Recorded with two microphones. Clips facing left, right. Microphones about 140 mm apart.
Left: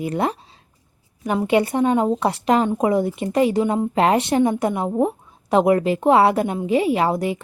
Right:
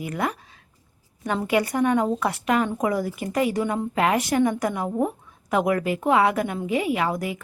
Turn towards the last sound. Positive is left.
turn(degrees=30)  # may be behind; listen again after turning